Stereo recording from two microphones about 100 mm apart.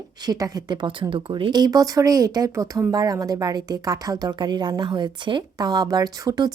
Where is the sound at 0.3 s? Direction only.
40° right (ahead or behind).